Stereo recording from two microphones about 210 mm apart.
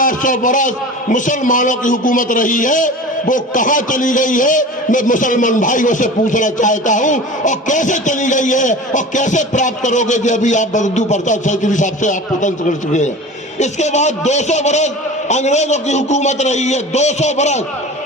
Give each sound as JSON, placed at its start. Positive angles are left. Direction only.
{"t": 0.0, "sound": "a man's voice", "side_deg": 40}